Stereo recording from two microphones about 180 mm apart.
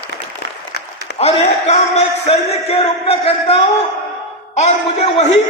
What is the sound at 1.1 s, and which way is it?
A man's voice, 35° left (ahead or behind).